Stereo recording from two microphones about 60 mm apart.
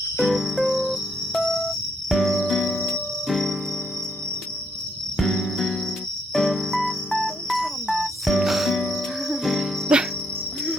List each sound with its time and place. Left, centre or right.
0.2 s cricket: centre
5.1 s music: centre
6.3 s cricket: centre
9.9 s cricket: centre